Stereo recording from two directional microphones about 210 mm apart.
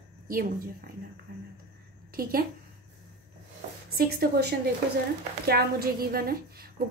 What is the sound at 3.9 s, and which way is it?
A woman's voice, 45° right (ahead or behind).